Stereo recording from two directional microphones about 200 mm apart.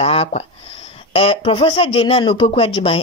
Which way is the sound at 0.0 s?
30° left (ahead or behind).